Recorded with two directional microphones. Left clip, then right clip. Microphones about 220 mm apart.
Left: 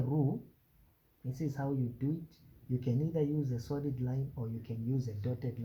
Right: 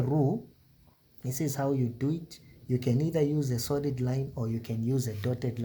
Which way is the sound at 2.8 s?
40° right (ahead or behind).